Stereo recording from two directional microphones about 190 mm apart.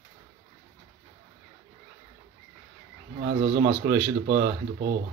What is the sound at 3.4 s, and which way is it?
Speech, 45° right (ahead or behind).